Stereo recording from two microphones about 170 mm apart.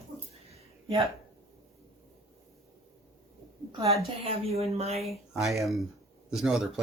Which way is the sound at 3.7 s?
35° right (ahead or behind).